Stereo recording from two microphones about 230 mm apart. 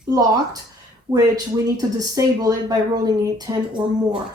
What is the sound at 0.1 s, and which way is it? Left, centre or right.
Speech, centre.